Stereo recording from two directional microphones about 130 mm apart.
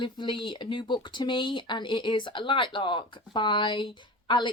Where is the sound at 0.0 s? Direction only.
40° left (ahead or behind).